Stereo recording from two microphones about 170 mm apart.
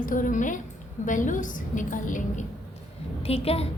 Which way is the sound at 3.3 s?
35° left (ahead or behind).